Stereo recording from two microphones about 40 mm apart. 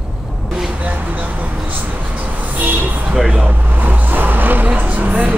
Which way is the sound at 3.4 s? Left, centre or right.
Right.